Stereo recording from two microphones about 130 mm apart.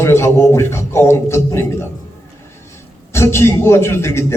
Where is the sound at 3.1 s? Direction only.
20° left (ahead or behind).